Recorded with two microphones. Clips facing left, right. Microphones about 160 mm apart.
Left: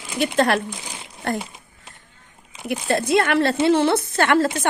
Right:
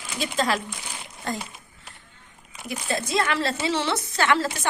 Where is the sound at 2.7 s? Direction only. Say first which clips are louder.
Left 7 dB; 65° left (ahead or behind).